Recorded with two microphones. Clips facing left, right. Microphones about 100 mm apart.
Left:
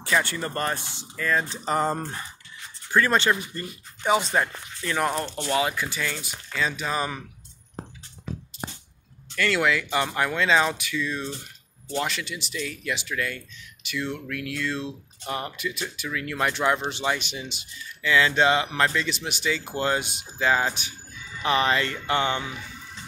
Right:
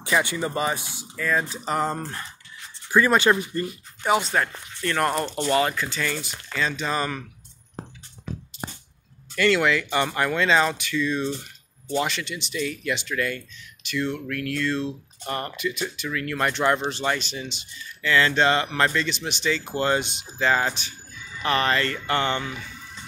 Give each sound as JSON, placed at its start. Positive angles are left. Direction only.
{"t": 0.0, "sound": "speech", "side_deg": -10}
{"t": 2.0, "sound": "speech", "side_deg": 15}
{"t": 2.9, "sound": "speech", "side_deg": -15}
{"t": 4.0, "sound": "speech", "side_deg": 0}
{"t": 9.3, "sound": "speech", "side_deg": 0}